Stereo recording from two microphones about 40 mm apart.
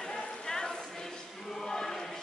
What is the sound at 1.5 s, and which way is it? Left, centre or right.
Choir, centre.